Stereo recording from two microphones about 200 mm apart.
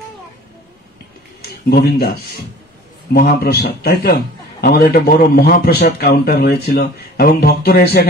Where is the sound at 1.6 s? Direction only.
50° left (ahead or behind).